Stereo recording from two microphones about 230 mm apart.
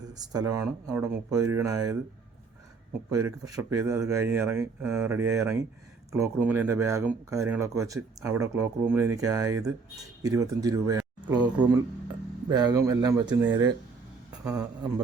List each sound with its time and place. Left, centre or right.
0.1 s speech: centre
3.1 s speech: centre